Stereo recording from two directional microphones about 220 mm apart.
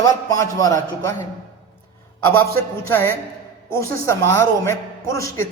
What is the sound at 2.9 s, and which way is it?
A man's voice, 10° left (ahead or behind).